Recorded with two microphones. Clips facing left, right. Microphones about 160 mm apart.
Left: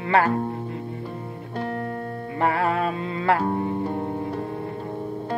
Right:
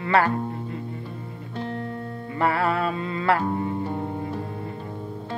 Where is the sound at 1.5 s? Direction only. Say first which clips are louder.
Left 2 dB; 50° left (ahead or behind).